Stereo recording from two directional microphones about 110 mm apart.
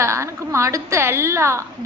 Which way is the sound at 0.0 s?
25° right (ahead or behind).